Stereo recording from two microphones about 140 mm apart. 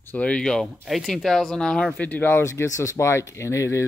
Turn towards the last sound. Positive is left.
turn(degrees=20)  # may be behind; listen again after turning